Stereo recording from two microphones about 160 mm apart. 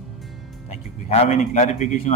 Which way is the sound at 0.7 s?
45° left (ahead or behind).